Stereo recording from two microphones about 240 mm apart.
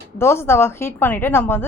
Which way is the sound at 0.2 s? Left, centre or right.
Centre.